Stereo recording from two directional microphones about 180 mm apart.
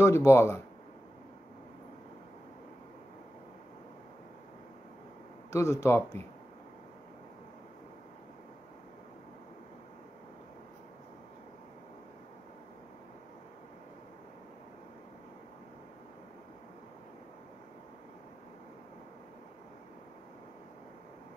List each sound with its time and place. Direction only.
0.0 s speech: 15° left (ahead or behind)
5.5 s speech: 15° left (ahead or behind)